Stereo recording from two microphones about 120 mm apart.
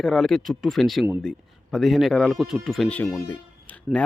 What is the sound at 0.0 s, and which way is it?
Speech, centre (ahead or behind).